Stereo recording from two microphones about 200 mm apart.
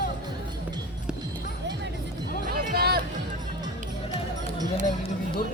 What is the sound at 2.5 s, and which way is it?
Music, 50° right (ahead or behind).